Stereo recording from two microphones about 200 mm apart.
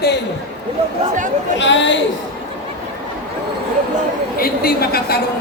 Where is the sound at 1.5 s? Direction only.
65° left (ahead or behind).